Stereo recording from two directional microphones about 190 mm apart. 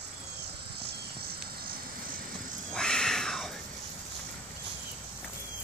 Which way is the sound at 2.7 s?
5° left (ahead or behind).